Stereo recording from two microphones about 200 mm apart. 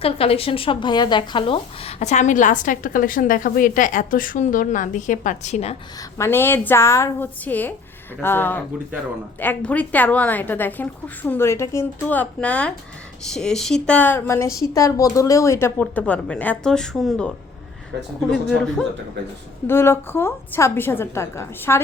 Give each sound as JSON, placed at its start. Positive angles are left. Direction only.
{"t": 0.0, "sound": "a woman's voice", "side_deg": 30}
{"t": 6.0, "sound": "a woman's voice", "side_deg": 15}